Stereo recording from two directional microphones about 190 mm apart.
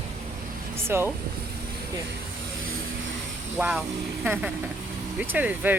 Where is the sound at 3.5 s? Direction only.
5° right (ahead or behind).